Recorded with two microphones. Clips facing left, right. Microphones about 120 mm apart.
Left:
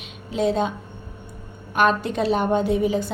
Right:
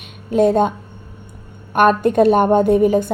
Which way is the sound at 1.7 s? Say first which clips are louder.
Right 7 dB; 55° right (ahead or behind).